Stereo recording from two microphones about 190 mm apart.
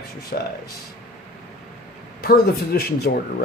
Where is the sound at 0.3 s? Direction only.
45° left (ahead or behind).